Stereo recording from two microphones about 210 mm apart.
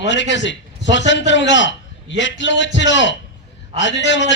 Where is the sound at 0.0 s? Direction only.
60° left (ahead or behind).